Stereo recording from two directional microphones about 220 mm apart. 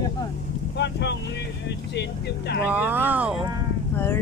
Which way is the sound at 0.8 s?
50° left (ahead or behind).